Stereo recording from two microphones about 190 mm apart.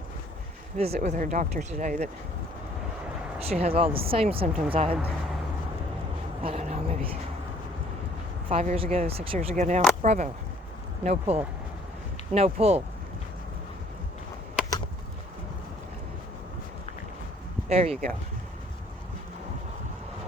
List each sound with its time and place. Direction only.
0.8 s speech: 35° right (ahead or behind)
3.4 s speech: 35° right (ahead or behind)
6.4 s a sound: 35° right (ahead or behind)
8.5 s speech: 30° right (ahead or behind)
17.7 s speech: 30° right (ahead or behind)